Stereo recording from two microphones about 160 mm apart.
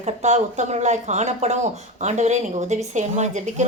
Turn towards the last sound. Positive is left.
turn(degrees=-45)  # may be behind; listen again after turning